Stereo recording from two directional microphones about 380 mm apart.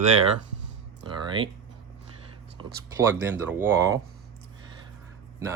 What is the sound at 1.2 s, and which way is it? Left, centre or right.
Speech, centre.